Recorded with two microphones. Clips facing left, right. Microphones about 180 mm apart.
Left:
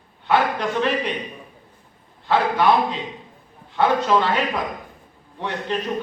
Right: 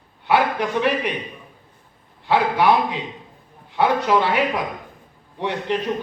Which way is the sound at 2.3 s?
15° right (ahead or behind).